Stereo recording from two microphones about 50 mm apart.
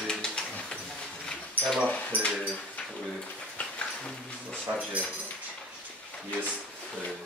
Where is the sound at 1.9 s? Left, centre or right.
Left.